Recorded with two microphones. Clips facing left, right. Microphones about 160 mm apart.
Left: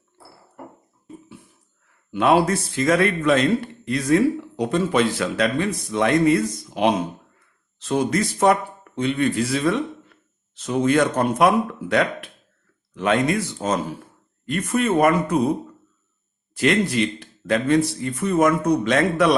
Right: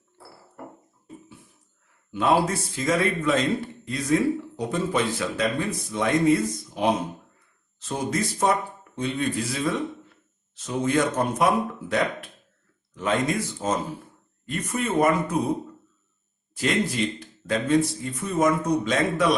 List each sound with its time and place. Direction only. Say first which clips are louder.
2.1 s speech: left 4 dB; 70° left (ahead or behind)
16.6 s speech: left 5 dB; 70° left (ahead or behind)